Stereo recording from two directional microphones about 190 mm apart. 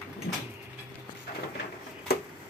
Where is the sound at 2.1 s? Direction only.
55° left (ahead or behind).